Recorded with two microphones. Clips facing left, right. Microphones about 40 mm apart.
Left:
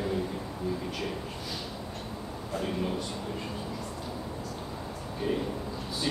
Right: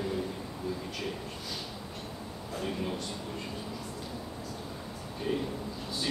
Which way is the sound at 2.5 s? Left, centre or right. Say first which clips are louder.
Left 3 dB; centre.